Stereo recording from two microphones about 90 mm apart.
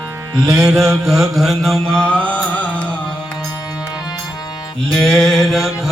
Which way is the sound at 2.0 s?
15° left (ahead or behind).